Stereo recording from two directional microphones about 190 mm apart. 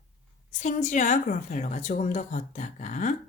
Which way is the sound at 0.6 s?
40° left (ahead or behind).